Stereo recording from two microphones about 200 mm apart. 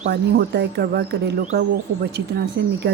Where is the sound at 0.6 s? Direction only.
55° right (ahead or behind).